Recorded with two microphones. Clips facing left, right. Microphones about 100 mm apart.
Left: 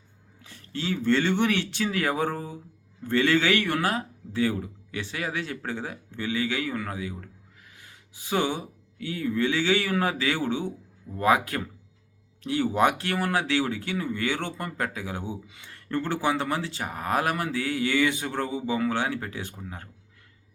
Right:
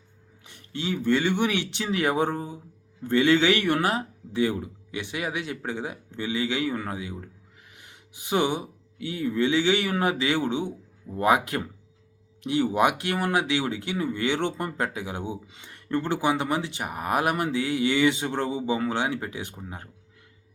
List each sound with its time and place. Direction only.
0.4 s speech: 20° right (ahead or behind)